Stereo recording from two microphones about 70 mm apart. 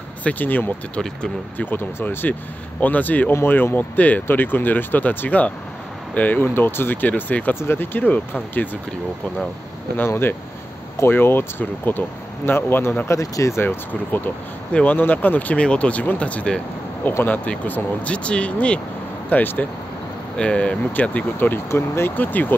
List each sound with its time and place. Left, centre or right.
0.2 s speech: left
9.9 s speech: left
13.1 s speech: left
13.6 s speech: left
14.7 s speech: centre
19.2 s speech: left
20.3 s speech: centre
21.6 s speech: left
22.2 s speech: left